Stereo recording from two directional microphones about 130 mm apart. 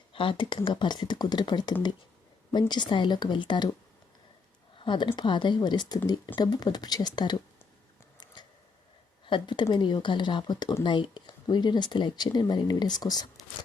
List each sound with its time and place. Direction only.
0.1 s speech: 40° left (ahead or behind)
4.8 s speech: 40° left (ahead or behind)
9.2 s a woman's voice: 40° left (ahead or behind)